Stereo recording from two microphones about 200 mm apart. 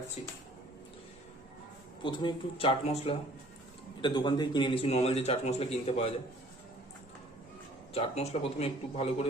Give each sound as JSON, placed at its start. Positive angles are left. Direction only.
{"t": 2.0, "sound": "speech", "side_deg": 20}
{"t": 7.9, "sound": "speech", "side_deg": 30}